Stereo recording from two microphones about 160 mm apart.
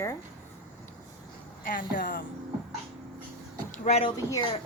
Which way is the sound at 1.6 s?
60° left (ahead or behind).